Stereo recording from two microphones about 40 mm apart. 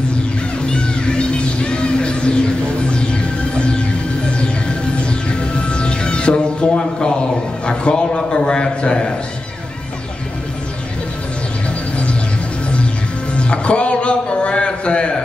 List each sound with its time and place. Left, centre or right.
0.1 s music: left
13.3 s music: left